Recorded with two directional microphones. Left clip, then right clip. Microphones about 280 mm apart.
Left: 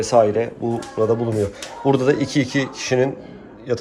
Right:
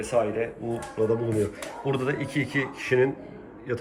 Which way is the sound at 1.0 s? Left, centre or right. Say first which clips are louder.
Left 5 dB; centre.